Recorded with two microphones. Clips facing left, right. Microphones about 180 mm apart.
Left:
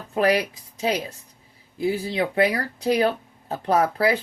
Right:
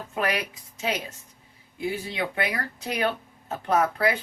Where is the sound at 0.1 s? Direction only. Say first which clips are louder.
Left 8 dB; 35° left (ahead or behind).